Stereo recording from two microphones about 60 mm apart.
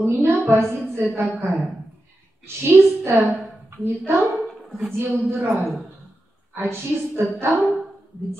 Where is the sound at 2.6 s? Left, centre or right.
Right.